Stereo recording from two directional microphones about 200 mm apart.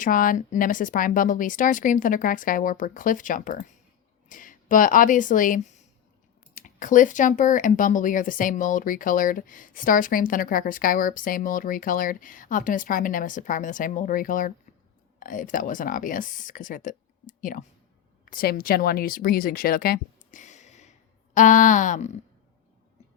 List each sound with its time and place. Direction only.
0.0 s speech: 45° left (ahead or behind)